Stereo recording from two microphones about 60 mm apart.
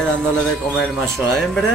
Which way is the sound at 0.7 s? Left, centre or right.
Centre.